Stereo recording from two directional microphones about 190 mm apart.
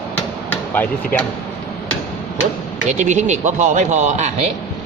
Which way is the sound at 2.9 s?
40° right (ahead or behind).